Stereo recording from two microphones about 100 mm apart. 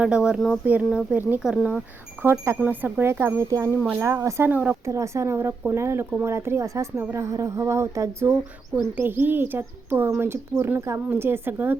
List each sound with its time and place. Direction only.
0.0 s speech: 10° right (ahead or behind)
0.6 s speech: 15° right (ahead or behind)
2.2 s speech: 30° right (ahead or behind)
2.6 s speech: 15° right (ahead or behind)
4.9 s speech: 30° right (ahead or behind)